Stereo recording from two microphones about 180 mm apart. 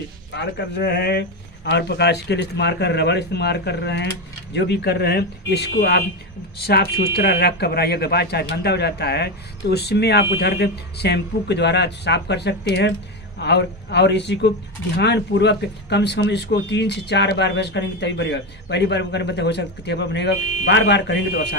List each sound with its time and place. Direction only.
0.3 s speech: 75° left (ahead or behind)